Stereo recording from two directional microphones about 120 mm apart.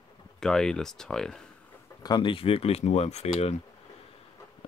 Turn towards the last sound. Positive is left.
turn(degrees=65)  # may be behind; listen again after turning